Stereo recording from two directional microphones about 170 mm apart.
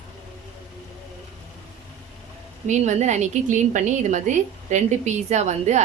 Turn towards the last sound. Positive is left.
turn(degrees=-40)  # may be behind; listen again after turning